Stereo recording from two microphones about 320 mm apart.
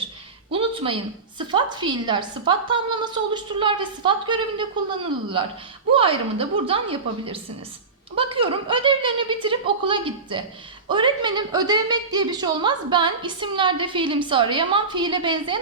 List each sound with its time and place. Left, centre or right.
0.5 s a sound: centre
1.4 s a woman's voice: centre
5.9 s a woman's voice: centre